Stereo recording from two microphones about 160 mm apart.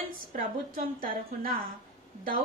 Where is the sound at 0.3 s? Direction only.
60° right (ahead or behind).